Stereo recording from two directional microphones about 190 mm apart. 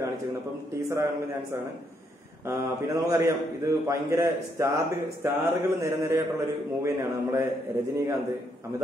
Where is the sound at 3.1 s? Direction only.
15° right (ahead or behind).